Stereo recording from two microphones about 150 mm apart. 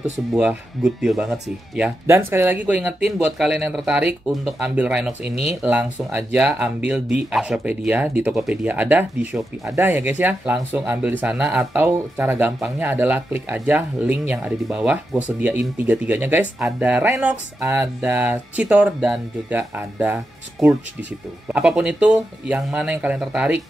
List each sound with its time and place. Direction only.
0.3 s speech: 5° right (ahead or behind)
1.8 s speech: 15° right (ahead or behind)
5.3 s speech: 40° left (ahead or behind)
5.6 s speech: 10° right (ahead or behind)
12.5 s speech: centre (ahead or behind)